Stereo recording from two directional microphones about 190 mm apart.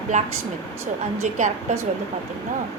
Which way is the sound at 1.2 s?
40° right (ahead or behind).